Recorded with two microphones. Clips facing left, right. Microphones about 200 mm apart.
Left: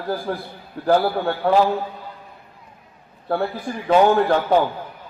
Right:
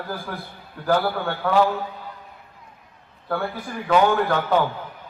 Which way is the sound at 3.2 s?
30° left (ahead or behind).